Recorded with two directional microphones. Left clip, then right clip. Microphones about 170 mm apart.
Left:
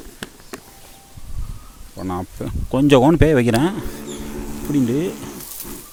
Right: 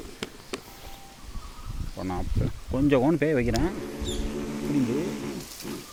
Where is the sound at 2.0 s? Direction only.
40° left (ahead or behind).